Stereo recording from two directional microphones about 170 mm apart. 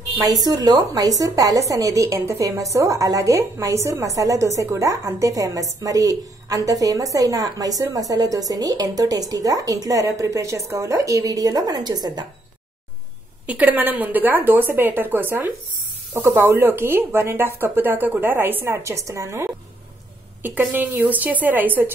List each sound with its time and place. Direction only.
0.2 s a woman's voice: 20° right (ahead or behind)
13.5 s speech: 10° right (ahead or behind)